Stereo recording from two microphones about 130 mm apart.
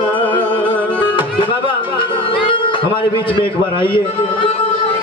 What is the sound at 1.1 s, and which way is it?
Music, 40° left (ahead or behind).